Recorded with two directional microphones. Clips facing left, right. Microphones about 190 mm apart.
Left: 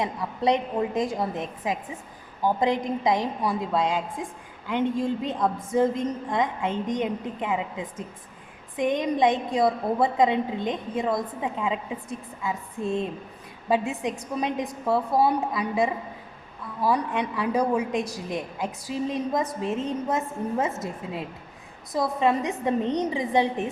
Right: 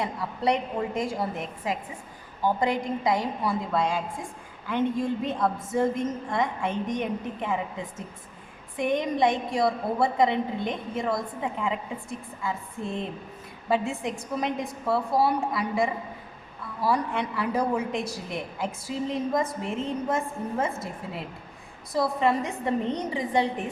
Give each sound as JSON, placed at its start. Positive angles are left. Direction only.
{"t": 0.0, "sound": "a woman's voice", "side_deg": 20}